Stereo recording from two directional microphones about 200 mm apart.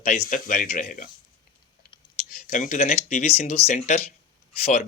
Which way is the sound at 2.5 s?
35° left (ahead or behind).